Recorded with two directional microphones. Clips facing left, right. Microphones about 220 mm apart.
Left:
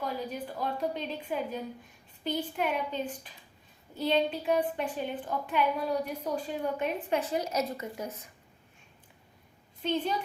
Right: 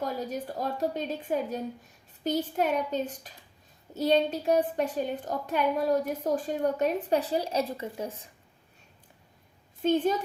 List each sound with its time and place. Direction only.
0.0 s a woman's voice: 45° right (ahead or behind); by 8.3 s 30° right (ahead or behind)
9.8 s a woman's voice: 45° right (ahead or behind)